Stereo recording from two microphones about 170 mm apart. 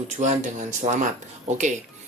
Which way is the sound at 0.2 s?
45° right (ahead or behind).